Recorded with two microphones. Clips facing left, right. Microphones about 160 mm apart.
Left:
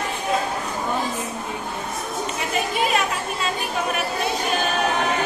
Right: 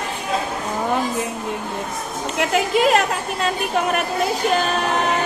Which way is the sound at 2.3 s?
90° right.